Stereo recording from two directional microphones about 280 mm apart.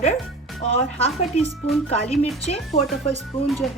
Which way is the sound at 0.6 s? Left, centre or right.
Left.